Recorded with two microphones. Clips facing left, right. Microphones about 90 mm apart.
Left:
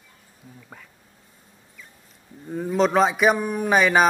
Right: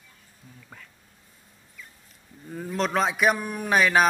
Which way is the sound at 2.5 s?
5° left (ahead or behind).